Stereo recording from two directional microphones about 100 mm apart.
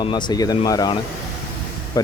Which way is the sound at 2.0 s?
40° left (ahead or behind).